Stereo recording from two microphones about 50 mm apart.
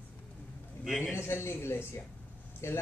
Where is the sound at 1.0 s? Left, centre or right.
Left.